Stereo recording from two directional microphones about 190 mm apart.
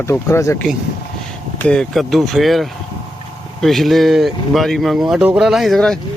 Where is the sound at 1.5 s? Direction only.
5° left (ahead or behind).